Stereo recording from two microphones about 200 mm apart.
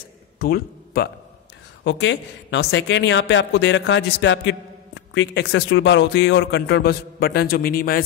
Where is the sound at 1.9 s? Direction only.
65° left (ahead or behind).